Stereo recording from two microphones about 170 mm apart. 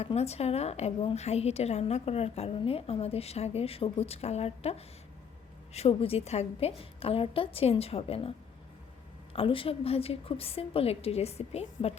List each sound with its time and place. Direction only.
0.0 s a woman's voice: 40° left (ahead or behind)
9.3 s a woman's voice: 35° left (ahead or behind)